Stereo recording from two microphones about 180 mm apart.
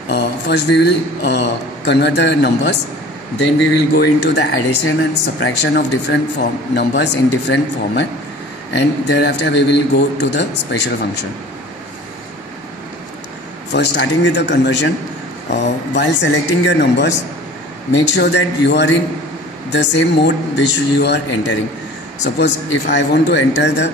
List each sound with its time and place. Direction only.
0.1 s a man's voice: 70° left (ahead or behind)
3.9 s a man's voice: 70° left (ahead or behind)
13.7 s a man's voice: 75° left (ahead or behind)